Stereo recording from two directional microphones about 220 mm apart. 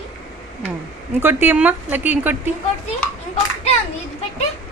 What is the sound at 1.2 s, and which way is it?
Speech, 10° right (ahead or behind).